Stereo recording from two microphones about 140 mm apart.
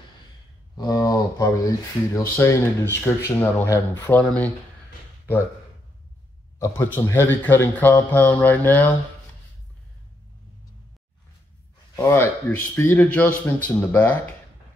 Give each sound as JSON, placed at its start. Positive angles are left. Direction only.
{"t": 0.7, "sound": "a man's voice", "side_deg": 25}
{"t": 6.6, "sound": "a man's voice", "side_deg": 15}
{"t": 11.9, "sound": "a man's voice", "side_deg": 20}